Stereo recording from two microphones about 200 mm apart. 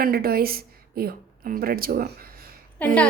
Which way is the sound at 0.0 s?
50° right (ahead or behind).